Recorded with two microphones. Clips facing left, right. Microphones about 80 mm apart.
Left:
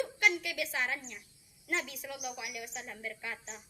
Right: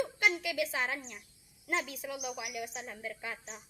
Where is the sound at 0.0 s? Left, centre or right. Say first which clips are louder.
Even; right.